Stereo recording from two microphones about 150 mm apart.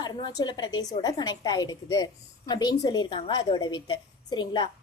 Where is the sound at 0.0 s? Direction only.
30° left (ahead or behind).